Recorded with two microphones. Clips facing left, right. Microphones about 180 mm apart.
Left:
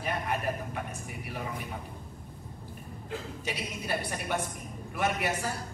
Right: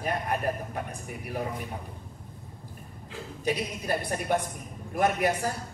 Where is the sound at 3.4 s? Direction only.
40° right (ahead or behind).